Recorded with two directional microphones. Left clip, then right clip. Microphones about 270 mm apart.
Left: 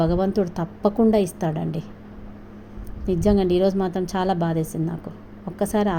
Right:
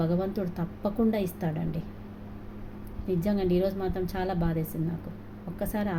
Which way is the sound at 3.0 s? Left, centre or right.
Left.